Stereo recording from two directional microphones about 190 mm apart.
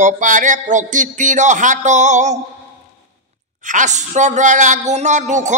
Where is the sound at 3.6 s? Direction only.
40° right (ahead or behind).